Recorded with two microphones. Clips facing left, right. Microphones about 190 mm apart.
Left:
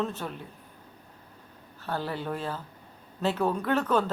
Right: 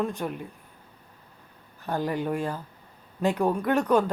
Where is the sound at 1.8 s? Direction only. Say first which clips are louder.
Right 4 dB; 15° right (ahead or behind).